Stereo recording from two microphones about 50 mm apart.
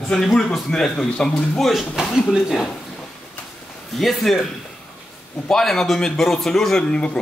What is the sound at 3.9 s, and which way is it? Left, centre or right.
Speech, centre.